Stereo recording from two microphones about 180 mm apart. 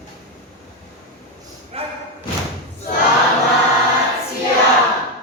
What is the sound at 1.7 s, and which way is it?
Thump, 35° right (ahead or behind).